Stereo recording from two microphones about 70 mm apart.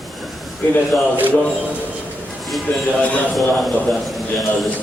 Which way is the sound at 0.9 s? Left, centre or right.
Left.